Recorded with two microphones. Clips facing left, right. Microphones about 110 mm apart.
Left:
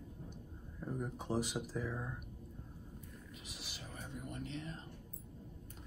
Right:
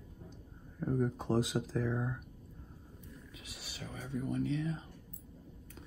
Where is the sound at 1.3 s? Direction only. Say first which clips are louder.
Right 3 dB; 90° right.